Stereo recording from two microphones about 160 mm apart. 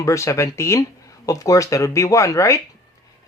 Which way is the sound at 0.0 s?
20° left (ahead or behind).